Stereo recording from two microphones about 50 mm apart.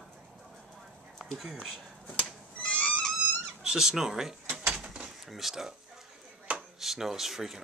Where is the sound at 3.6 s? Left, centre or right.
Centre.